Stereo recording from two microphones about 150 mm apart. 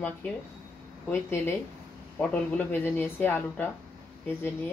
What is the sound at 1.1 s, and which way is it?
Speech, 15° left (ahead or behind).